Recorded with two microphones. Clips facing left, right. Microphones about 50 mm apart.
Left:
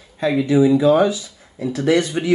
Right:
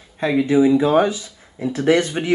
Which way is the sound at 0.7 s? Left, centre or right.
Right.